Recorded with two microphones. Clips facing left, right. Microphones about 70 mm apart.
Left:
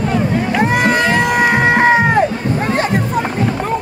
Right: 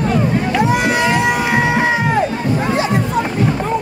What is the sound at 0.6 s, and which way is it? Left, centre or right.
Crowd, left.